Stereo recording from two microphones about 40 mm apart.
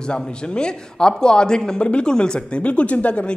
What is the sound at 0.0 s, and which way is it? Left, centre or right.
A man's voice, left.